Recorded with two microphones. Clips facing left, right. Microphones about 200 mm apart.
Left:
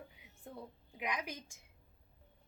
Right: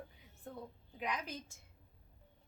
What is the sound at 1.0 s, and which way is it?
Speech, 10° left (ahead or behind).